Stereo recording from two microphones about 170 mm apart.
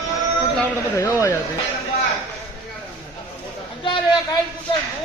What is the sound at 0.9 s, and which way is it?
Speech, 15° left (ahead or behind).